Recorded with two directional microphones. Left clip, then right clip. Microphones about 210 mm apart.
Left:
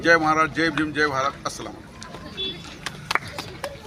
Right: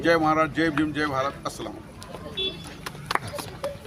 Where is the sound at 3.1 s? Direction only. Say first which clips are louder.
Left 2 dB; 45° right (ahead or behind).